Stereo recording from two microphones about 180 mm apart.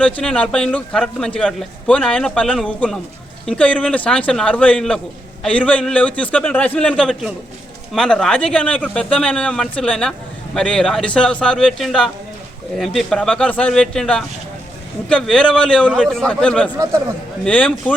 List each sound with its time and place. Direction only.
0.0 s a man's voice: 5° left (ahead or behind)
16.7 s speech: 20° right (ahead or behind)
17.4 s a man's voice: 5° left (ahead or behind)